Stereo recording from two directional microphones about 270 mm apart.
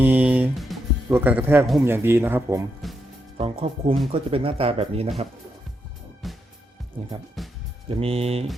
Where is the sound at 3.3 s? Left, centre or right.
Right.